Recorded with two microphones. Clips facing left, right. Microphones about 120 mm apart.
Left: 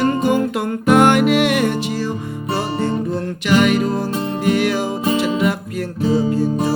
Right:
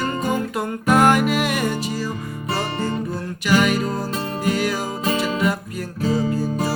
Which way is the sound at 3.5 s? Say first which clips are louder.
Left 3 dB; 60° left (ahead or behind).